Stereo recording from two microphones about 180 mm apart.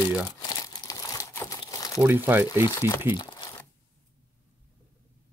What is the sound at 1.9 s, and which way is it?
Speech, 10° right (ahead or behind).